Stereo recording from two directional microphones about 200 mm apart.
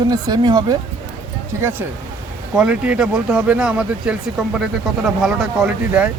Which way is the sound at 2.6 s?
5° right (ahead or behind).